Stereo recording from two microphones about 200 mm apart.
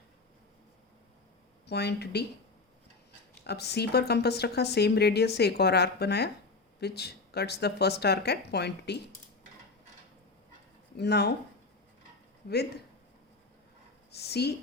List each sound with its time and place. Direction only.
1.6 s a woman's voice: 55° left (ahead or behind)
3.4 s a woman's voice: 55° left (ahead or behind)
10.9 s a woman's voice: 55° left (ahead or behind)
12.5 s speech: 55° left (ahead or behind)
14.1 s speech: 55° left (ahead or behind)